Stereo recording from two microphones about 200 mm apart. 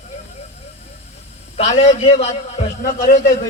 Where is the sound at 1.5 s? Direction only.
30° left (ahead or behind).